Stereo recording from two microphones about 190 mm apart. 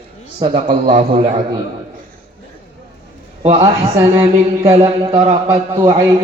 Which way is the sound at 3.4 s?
35° right (ahead or behind).